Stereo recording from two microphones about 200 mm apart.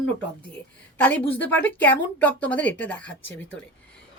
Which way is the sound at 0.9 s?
10° left (ahead or behind).